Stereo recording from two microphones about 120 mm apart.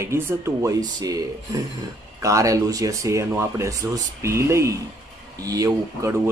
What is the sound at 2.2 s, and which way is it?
Speech, 25° right (ahead or behind).